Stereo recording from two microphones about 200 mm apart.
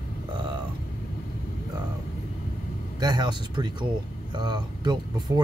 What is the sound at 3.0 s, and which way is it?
Speech, 20° right (ahead or behind).